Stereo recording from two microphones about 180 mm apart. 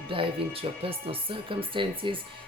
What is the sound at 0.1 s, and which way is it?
Speech, 30° right (ahead or behind).